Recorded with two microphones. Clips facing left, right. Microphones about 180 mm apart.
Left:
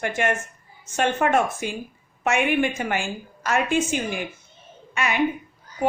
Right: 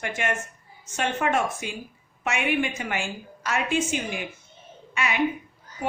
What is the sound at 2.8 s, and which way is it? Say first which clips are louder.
A woman's voice: left 4 dB; 45° left (ahead or behind).